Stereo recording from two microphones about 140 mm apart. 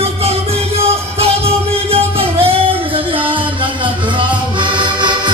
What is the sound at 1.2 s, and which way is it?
Music, 45° right (ahead or behind).